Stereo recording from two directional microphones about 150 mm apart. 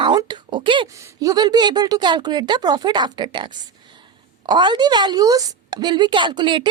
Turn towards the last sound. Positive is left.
turn(degrees=-30)  # may be behind; listen again after turning